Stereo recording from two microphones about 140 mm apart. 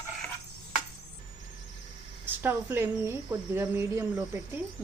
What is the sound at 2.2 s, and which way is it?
A woman's voice, 15° right (ahead or behind).